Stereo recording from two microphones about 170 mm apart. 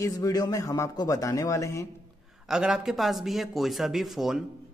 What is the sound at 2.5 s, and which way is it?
A man's voice, 5° right (ahead or behind).